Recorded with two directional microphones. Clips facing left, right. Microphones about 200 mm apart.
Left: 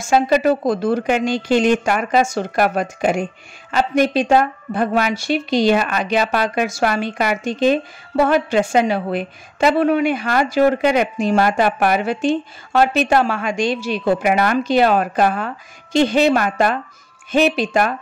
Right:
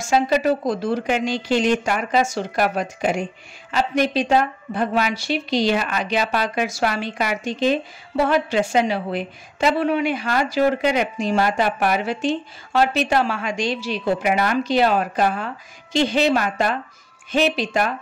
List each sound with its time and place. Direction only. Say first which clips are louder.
0.1 s a woman's voice: left 3 dB; 55° left (ahead or behind)